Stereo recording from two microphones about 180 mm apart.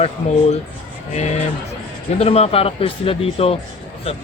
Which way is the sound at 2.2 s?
35° left (ahead or behind).